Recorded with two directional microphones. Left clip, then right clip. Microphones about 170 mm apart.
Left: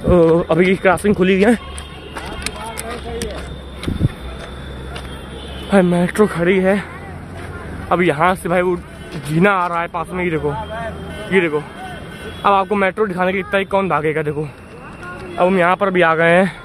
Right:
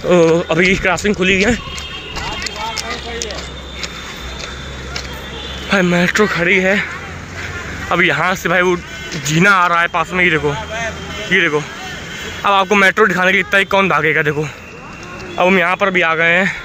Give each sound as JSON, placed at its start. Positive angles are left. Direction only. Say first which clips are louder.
{"t": 0.1, "sound": "speech", "louder": "right 1 dB", "side_deg": 20}
{"t": 1.2, "sound": "speech", "louder": "right 1 dB", "side_deg": 30}
{"t": 2.7, "sound": "a sound", "louder": "right 4 dB", "side_deg": 65}
{"t": 5.7, "sound": "speech", "louder": "right 1 dB", "side_deg": 15}
{"t": 7.9, "sound": "speech", "louder": "right 1 dB", "side_deg": 10}
{"t": 15.3, "sound": "speech", "louder": "right 2 dB", "side_deg": 0}
{"t": 15.8, "sound": "speech", "louder": "even", "side_deg": 30}